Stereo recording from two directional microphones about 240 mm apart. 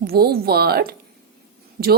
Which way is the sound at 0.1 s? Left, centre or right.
Right.